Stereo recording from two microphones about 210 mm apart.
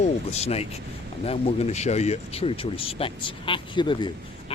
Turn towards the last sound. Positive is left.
turn(degrees=20)  # may be behind; listen again after turning